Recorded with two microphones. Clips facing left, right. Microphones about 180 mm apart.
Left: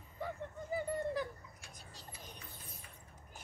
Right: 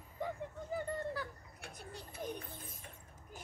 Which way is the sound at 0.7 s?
10° left (ahead or behind).